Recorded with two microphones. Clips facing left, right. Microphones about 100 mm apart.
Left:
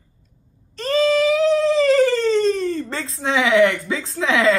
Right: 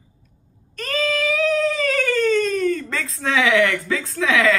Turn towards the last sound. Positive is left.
turn(degrees=25)  # may be behind; listen again after turning